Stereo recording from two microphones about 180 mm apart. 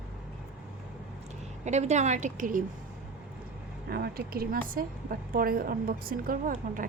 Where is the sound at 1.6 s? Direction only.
40° right (ahead or behind).